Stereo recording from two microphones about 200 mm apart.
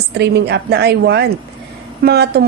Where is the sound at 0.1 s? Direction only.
55° right (ahead or behind).